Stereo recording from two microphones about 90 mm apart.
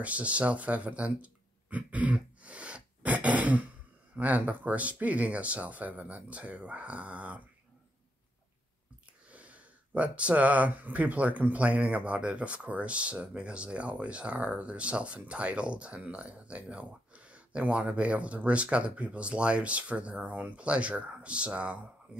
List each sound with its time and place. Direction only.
0.0 s speech: 15° right (ahead or behind)
9.3 s speech: 15° right (ahead or behind)